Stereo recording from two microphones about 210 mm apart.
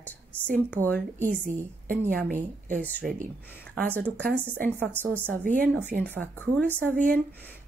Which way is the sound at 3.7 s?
5° left (ahead or behind).